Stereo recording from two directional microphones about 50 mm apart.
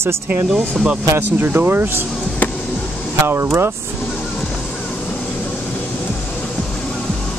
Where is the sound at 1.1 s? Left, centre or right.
Right.